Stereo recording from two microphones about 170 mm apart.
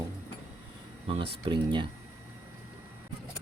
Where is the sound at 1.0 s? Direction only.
35° right (ahead or behind).